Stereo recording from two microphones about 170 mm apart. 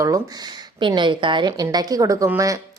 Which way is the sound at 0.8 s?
30° right (ahead or behind).